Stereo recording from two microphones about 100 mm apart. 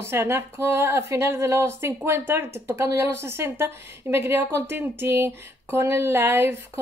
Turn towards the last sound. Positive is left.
turn(degrees=-20)  # may be behind; listen again after turning